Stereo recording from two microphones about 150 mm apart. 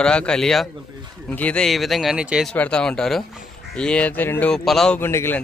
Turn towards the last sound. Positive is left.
turn(degrees=15)  # may be behind; listen again after turning